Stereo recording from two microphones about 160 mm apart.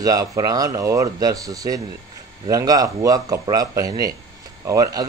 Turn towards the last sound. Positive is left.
turn(degrees=-20)  # may be behind; listen again after turning